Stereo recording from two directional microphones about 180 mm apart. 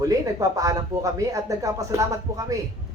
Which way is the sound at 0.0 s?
20° right (ahead or behind).